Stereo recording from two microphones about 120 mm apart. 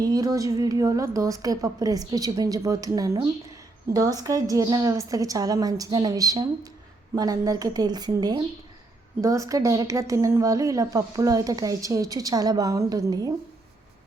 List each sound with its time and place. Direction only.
0.0 s a woman's voice: 30° right (ahead or behind)